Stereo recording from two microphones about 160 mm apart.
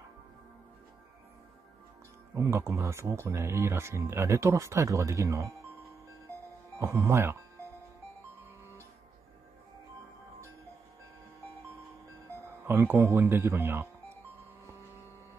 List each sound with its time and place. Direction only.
2.3 s speech: 15° right (ahead or behind)
6.8 s speech: 15° right (ahead or behind)
12.6 s speech: 15° right (ahead or behind)